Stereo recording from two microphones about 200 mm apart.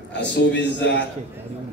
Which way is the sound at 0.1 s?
60° left (ahead or behind).